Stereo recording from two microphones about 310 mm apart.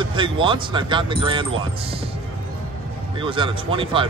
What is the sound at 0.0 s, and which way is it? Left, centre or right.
Speech, centre.